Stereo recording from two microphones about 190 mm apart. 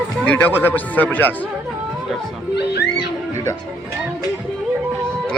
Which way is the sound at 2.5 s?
60° left (ahead or behind).